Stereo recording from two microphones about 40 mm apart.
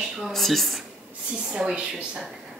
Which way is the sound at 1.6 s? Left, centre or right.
Right.